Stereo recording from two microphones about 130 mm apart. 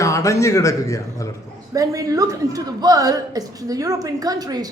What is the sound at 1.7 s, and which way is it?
A woman's voice, 25° right (ahead or behind).